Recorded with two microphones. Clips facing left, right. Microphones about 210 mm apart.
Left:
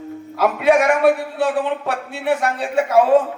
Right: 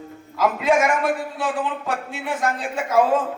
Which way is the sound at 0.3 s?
65° left (ahead or behind).